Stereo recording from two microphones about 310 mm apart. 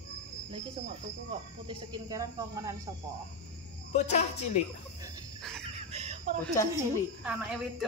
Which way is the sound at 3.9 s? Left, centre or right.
Left.